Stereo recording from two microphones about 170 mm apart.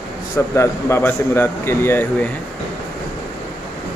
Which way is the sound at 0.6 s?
15° left (ahead or behind).